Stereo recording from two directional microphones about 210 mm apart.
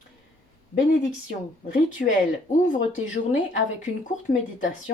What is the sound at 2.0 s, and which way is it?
Speech, 45° left (ahead or behind).